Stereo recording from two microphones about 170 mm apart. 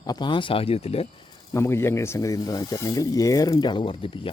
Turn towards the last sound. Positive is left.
turn(degrees=30)  # may be behind; listen again after turning